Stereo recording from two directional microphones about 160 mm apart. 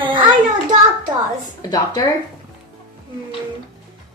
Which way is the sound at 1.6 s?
25° left (ahead or behind).